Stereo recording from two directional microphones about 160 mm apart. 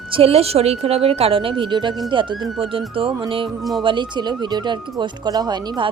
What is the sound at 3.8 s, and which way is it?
Speech, 30° right (ahead or behind).